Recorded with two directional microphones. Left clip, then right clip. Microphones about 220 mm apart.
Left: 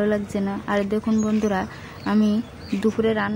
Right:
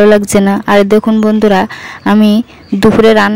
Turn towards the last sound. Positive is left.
turn(degrees=-50)  # may be behind; listen again after turning